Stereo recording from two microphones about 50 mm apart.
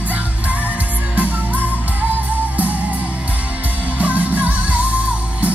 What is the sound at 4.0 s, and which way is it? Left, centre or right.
Music, right.